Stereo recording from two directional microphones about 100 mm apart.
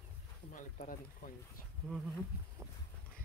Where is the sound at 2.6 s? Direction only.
30° right (ahead or behind).